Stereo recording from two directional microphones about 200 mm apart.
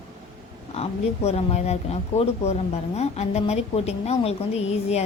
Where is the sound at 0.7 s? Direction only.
30° left (ahead or behind).